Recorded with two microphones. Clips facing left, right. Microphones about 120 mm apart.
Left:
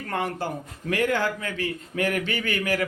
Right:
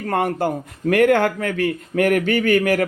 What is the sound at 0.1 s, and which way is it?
Speech, 50° right (ahead or behind).